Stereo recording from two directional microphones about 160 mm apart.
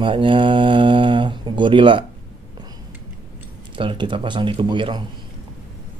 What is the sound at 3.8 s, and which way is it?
Speech, 30° right (ahead or behind).